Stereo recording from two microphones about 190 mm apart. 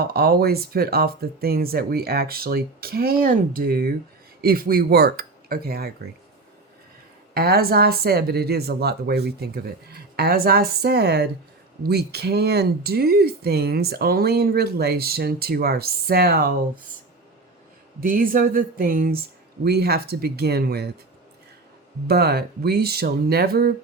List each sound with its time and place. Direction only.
0.0 s speech: 55° right (ahead or behind)
7.3 s speech: 55° right (ahead or behind)
18.0 s speech: 45° right (ahead or behind)
22.0 s speech: 55° right (ahead or behind)